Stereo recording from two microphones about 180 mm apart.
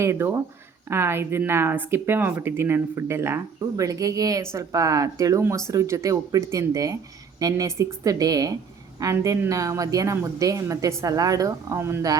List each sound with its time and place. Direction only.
0.0 s a woman's voice: 15° right (ahead or behind)